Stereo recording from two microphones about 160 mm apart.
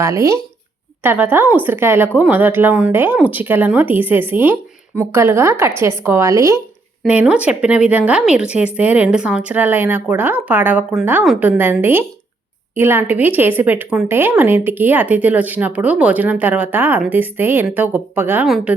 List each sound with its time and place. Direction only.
0.0 s speech: 20° right (ahead or behind)
18.4 s a woman's voice: centre (ahead or behind)